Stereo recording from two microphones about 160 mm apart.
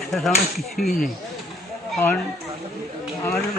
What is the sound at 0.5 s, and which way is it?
Speech, centre (ahead or behind).